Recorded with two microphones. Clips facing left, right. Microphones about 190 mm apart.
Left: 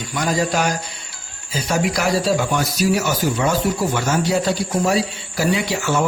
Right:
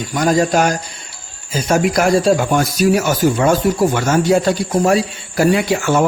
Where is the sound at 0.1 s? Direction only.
45° right (ahead or behind).